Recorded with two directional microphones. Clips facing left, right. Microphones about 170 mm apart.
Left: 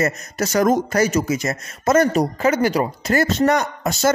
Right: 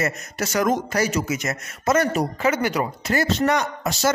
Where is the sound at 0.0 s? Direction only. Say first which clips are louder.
Left 4 dB; 40° left (ahead or behind).